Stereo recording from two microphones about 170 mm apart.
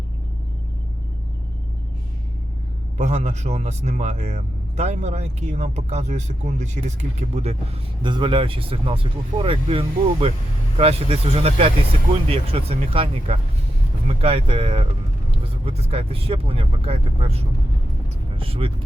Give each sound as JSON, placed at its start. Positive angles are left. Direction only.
{"t": 3.0, "sound": "speech", "side_deg": -40}
{"t": 8.0, "sound": "speech", "side_deg": -30}